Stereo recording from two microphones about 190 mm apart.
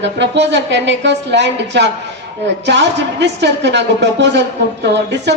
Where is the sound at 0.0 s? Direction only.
65° right (ahead or behind).